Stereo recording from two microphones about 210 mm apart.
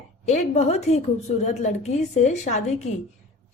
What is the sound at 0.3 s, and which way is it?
A woman's voice, 35° left (ahead or behind).